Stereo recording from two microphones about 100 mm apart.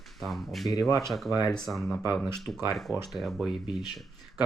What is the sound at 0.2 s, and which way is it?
Speech, centre (ahead or behind).